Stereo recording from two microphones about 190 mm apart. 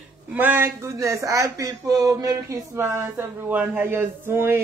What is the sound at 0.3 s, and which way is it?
Speech, 10° right (ahead or behind).